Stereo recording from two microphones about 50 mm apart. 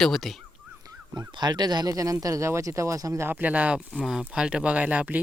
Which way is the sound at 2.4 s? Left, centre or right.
Right.